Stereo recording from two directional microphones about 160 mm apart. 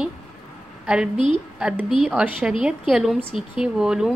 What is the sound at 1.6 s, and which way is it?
A woman's voice, 5° right (ahead or behind).